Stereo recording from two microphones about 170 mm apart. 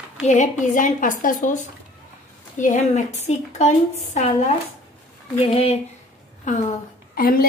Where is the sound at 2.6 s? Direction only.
45° left (ahead or behind).